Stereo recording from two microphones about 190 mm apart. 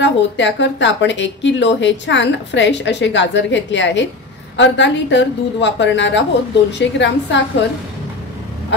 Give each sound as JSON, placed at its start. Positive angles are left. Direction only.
{"t": 0.0, "sound": "a woman's voice", "side_deg": 70}